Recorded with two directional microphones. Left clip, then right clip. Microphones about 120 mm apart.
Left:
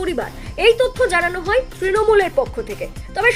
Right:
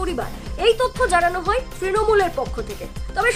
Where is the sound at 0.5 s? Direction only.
15° left (ahead or behind).